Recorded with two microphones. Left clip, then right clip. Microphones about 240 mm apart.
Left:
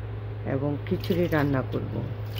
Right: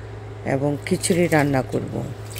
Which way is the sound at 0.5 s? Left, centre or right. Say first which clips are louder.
Right 7 dB; right.